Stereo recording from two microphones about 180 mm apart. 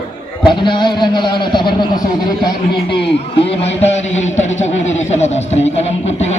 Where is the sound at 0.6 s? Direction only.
25° left (ahead or behind).